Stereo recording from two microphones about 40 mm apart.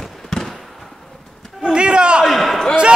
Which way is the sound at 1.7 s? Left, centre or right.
Right.